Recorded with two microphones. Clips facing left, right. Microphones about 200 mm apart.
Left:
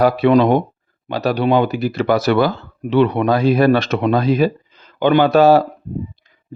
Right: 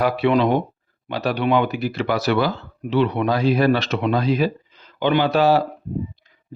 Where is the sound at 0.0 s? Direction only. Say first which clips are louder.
Left 5 dB; 40° left (ahead or behind).